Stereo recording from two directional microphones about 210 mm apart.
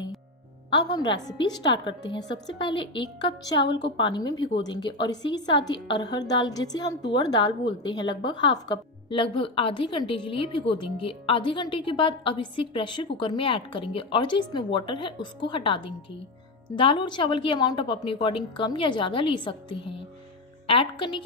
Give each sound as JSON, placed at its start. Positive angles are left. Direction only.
{"t": 0.7, "sound": "a woman's voice", "side_deg": 20}